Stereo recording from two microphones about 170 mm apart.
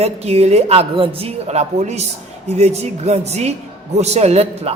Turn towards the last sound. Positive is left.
turn(degrees=-40)  # may be behind; listen again after turning